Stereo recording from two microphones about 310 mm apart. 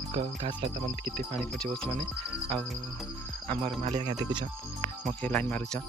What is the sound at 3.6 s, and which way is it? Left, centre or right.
Speech, centre.